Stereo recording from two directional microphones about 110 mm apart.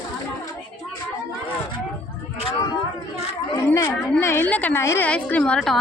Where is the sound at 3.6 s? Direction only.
25° left (ahead or behind).